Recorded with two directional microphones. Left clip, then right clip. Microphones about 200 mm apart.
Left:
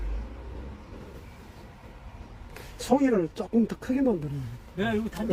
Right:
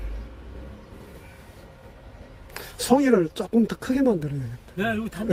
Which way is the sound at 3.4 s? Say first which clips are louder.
Right 4 dB; 20° right (ahead or behind).